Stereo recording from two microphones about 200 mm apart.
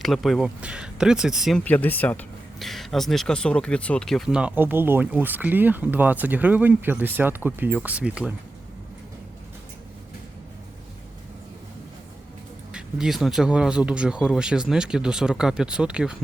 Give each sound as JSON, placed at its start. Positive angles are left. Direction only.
{"t": 0.0, "sound": "speech", "side_deg": 0}
{"t": 12.7, "sound": "speech", "side_deg": 0}